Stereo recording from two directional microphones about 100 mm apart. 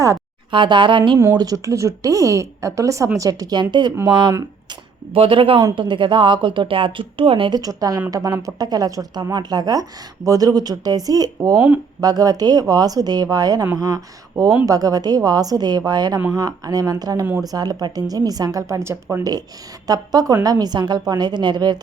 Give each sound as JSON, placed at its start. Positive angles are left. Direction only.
{"t": 0.5, "sound": "a woman's voice", "side_deg": -55}
{"t": 1.4, "sound": "a woman's voice", "side_deg": -35}
{"t": 4.7, "sound": "a woman's voice", "side_deg": -60}
{"t": 7.5, "sound": "speech", "side_deg": -40}
{"t": 19.9, "sound": "a woman's voice", "side_deg": -40}